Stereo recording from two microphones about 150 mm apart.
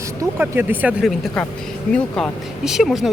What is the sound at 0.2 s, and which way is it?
Speech, 15° right (ahead or behind).